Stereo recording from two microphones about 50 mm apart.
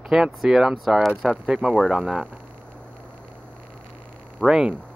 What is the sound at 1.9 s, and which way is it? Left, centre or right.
Speech, right.